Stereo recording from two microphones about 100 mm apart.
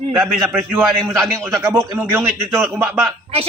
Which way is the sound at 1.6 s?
25° right (ahead or behind).